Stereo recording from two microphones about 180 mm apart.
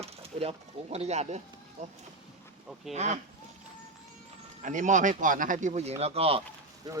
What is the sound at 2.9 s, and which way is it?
Speech, 40° right (ahead or behind).